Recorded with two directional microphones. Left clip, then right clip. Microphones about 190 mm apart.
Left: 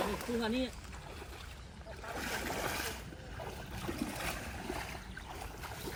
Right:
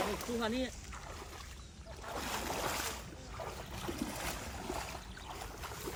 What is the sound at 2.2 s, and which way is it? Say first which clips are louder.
Boat: left 1 dB; centre (ahead or behind).